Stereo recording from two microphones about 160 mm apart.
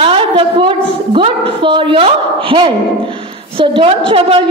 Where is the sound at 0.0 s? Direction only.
35° right (ahead or behind).